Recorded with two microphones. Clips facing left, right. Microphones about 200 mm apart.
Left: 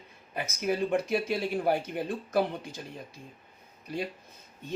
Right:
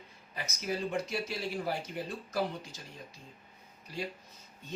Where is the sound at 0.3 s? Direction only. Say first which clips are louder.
Left 6 dB; 55° left (ahead or behind).